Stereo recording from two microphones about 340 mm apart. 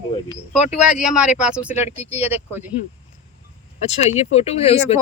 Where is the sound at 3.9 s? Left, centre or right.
Centre.